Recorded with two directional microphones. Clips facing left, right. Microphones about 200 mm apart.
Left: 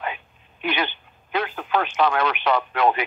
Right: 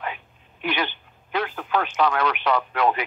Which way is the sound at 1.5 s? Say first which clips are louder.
Left 2 dB; 20° left (ahead or behind).